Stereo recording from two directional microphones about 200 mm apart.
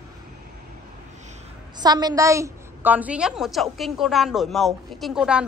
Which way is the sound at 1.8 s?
20° right (ahead or behind).